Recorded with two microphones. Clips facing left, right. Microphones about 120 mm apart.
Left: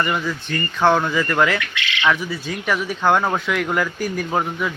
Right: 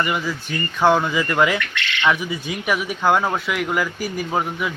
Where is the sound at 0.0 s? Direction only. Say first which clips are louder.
Left 1 dB; 5° right (ahead or behind).